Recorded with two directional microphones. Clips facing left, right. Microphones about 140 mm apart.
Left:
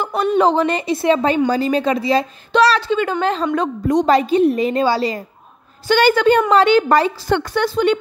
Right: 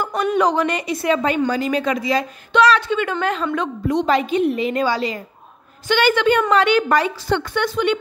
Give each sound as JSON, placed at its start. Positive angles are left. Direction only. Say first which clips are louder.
{"t": 0.2, "sound": "a woman's voice", "louder": "left 3 dB", "side_deg": 30}
{"t": 7.2, "sound": "a woman's voice", "louder": "left 2 dB", "side_deg": 50}
{"t": 7.5, "sound": "a woman's voice", "louder": "left 4 dB", "side_deg": 35}